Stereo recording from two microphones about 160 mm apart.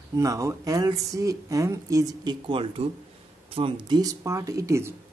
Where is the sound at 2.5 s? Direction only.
35° right (ahead or behind); by 4.9 s 20° right (ahead or behind).